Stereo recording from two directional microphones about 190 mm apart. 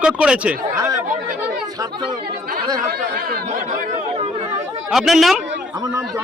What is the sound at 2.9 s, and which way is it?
Speech, 50° right (ahead or behind).